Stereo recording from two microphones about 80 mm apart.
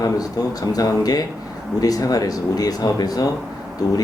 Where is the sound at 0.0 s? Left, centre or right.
Left.